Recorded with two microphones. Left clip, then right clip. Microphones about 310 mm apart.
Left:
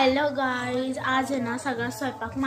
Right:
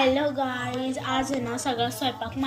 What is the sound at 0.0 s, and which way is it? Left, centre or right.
A woman's voice, centre.